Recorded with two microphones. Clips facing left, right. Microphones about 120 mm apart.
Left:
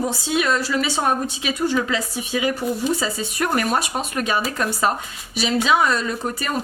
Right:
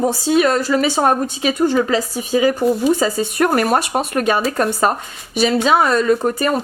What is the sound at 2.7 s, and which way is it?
Speech, 50° right (ahead or behind).